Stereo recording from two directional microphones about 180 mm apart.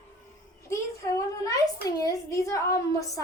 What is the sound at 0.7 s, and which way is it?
A child's voice, 20° left (ahead or behind).